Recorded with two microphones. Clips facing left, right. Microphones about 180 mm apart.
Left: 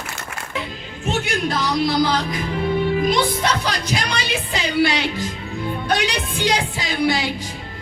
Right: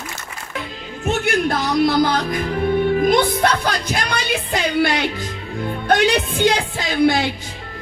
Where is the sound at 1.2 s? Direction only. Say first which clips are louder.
Right 3 dB; 55° right (ahead or behind).